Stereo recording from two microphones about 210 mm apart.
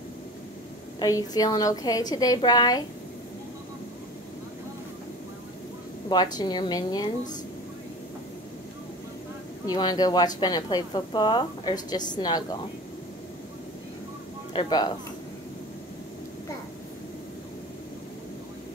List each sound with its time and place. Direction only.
0.9 s a woman's voice: 15° left (ahead or behind)
6.0 s a woman's voice: 20° left (ahead or behind)
9.7 s a woman's voice: 20° left (ahead or behind)
14.5 s speech: 20° left (ahead or behind)